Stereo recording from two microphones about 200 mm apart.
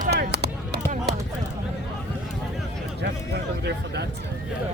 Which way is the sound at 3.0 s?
55° right (ahead or behind).